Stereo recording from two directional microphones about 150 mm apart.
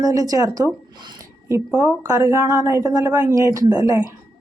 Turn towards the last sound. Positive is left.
turn(degrees=-25)  # may be behind; listen again after turning